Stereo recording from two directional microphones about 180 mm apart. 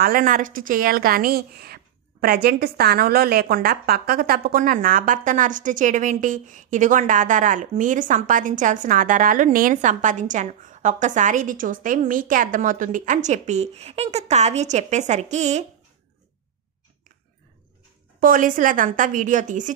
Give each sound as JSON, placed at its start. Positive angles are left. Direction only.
{"t": 0.0, "sound": "a woman's voice", "side_deg": -50}
{"t": 18.2, "sound": "a woman's voice", "side_deg": -50}